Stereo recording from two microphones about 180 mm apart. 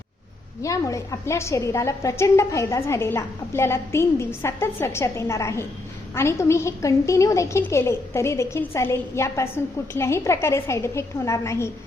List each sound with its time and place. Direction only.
0.6 s a woman's voice: 15° left (ahead or behind)